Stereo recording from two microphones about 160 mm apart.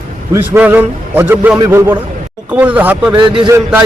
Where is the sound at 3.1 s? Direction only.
30° right (ahead or behind).